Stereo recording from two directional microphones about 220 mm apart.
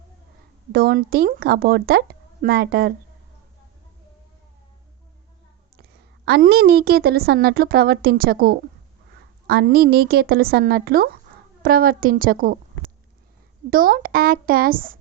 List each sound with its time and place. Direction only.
0.7 s a woman's voice: 45° right (ahead or behind)
6.2 s a woman's voice: 45° right (ahead or behind)
13.7 s a woman's voice: 40° right (ahead or behind)